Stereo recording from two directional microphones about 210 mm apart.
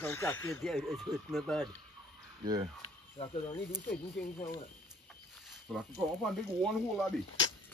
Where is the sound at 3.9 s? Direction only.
40° left (ahead or behind).